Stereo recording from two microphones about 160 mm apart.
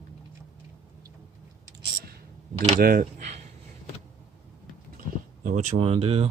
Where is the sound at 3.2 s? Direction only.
45° right (ahead or behind).